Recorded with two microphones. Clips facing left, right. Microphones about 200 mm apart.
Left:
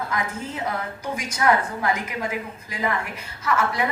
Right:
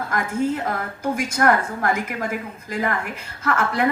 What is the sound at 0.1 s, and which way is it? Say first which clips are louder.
A woman's voice: right 6 dB; 50° right (ahead or behind).